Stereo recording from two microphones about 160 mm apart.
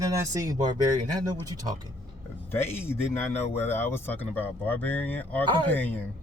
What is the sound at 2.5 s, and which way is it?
Speech, 15° left (ahead or behind).